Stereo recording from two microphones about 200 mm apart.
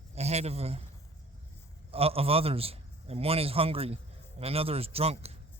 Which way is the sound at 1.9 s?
30° right (ahead or behind).